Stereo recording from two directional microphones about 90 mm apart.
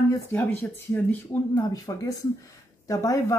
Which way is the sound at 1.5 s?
40° left (ahead or behind).